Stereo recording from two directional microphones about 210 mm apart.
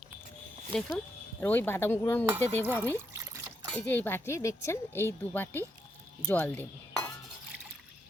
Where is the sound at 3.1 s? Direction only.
15° right (ahead or behind).